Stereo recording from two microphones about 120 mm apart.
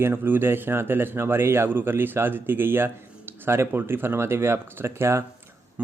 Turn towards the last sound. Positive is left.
turn(degrees=-20)  # may be behind; listen again after turning